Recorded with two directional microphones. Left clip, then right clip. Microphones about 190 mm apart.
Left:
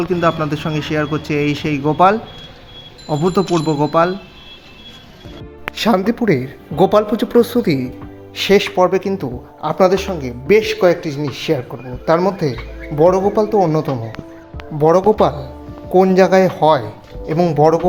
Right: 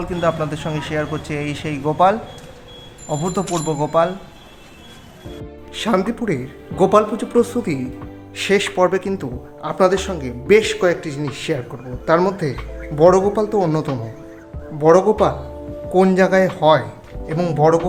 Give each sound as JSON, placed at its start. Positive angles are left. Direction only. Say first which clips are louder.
{"t": 0.0, "sound": "speech", "louder": "left 4 dB", "side_deg": 15}
{"t": 5.7, "sound": "speech", "louder": "left 3 dB", "side_deg": 30}
{"t": 14.8, "sound": "speech", "louder": "left 1 dB", "side_deg": 25}
{"t": 15.9, "sound": "speech", "louder": "left 3 dB", "side_deg": 15}